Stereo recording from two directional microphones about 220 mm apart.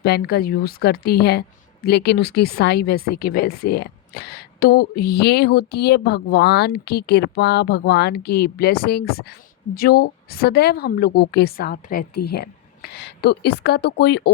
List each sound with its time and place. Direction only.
0.0 s speech: 45° left (ahead or behind)